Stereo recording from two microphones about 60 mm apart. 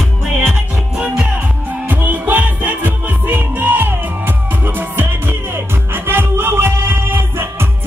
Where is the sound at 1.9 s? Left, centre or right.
Right.